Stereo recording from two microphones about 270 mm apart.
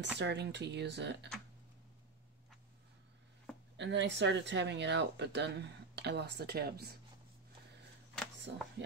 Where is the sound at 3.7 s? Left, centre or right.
Right.